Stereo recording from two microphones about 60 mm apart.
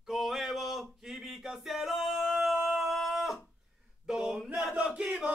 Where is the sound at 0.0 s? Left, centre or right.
Centre.